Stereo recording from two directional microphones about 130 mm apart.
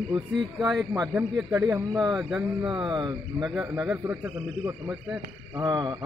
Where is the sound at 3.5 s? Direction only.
20° right (ahead or behind).